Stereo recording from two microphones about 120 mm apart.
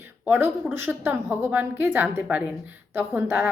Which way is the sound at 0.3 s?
15° right (ahead or behind).